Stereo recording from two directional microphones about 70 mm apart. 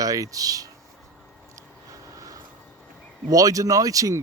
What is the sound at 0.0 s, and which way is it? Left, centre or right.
Speech, right.